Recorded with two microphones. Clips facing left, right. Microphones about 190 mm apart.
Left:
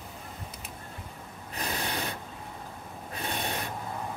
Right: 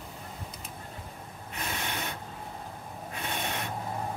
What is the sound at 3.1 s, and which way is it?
Rub, 35° left (ahead or behind).